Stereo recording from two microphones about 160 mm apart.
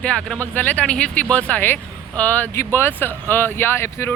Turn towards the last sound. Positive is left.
turn(degrees=15)  # may be behind; listen again after turning